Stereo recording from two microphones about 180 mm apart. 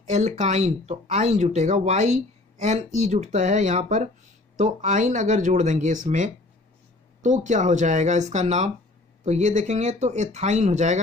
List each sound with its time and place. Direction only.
0.0 s speech: 40° right (ahead or behind)